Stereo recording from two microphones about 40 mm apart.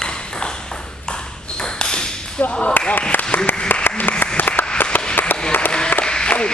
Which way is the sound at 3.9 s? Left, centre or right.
Left.